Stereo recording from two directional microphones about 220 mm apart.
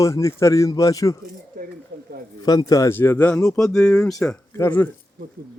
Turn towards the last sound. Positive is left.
turn(degrees=10)  # may be behind; listen again after turning